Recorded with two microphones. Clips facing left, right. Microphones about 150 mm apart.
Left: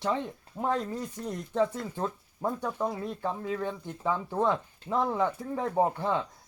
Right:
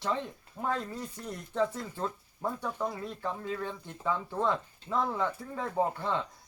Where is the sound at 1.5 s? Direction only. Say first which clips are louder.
Left 2 dB; 20° left (ahead or behind).